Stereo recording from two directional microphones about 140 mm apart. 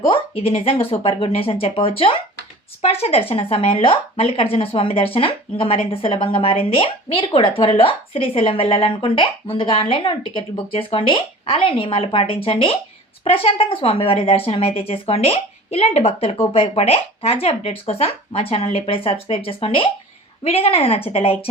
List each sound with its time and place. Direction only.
0.1 s a woman's voice: 45° left (ahead or behind)